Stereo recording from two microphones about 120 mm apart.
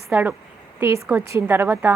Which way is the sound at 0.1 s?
15° right (ahead or behind).